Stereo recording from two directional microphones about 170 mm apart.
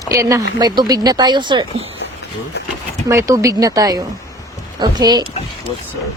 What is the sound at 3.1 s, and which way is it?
Speech, 15° right (ahead or behind).